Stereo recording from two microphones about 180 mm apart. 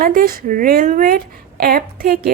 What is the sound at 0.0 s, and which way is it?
Speech, 55° right (ahead or behind).